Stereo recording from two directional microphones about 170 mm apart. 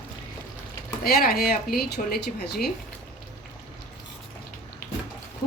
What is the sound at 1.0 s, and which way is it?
Speech, 60° left (ahead or behind).